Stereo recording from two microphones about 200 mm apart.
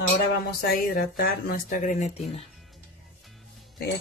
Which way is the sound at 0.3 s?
50° left (ahead or behind).